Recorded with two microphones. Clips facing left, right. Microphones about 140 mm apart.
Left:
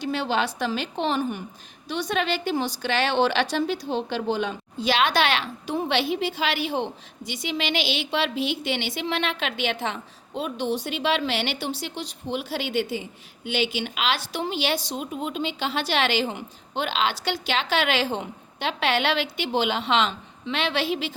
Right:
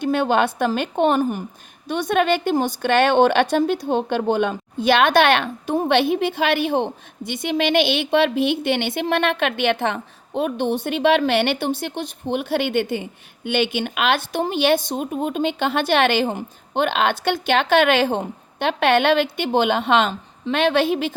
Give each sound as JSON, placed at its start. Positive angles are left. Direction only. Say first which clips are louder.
{"t": 0.0, "sound": "a woman's voice", "louder": "right 7 dB", "side_deg": -55}